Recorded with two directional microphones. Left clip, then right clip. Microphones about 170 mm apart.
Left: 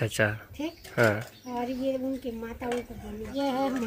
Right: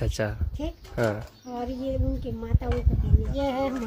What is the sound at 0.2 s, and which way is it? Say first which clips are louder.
Speech: left 5 dB; 5° right (ahead or behind).